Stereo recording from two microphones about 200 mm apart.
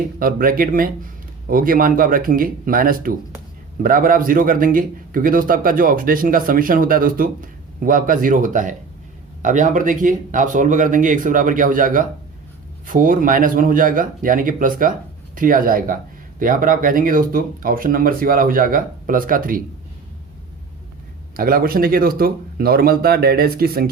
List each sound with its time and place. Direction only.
0.2 s a man's voice: 45° right (ahead or behind)
21.3 s a man's voice: 45° right (ahead or behind)